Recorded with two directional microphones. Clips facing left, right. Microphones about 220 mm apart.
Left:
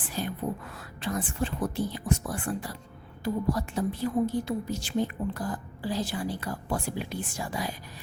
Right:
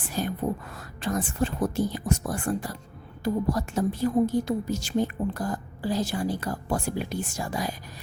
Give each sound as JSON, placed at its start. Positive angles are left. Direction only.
{"t": 0.2, "sound": "whispering", "side_deg": -45}
{"t": 0.8, "sound": "a woman's voice", "side_deg": -45}